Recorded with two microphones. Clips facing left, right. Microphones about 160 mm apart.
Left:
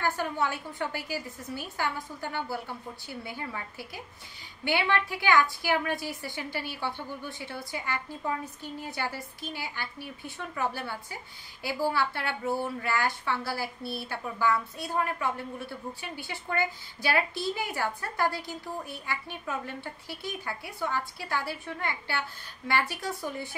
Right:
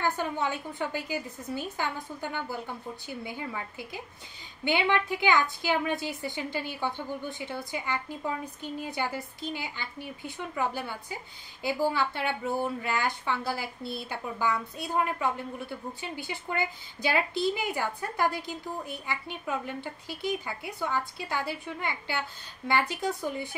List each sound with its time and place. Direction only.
0.0 s speech: 20° right (ahead or behind)